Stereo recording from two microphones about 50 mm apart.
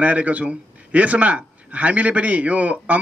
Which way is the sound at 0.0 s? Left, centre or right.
Right.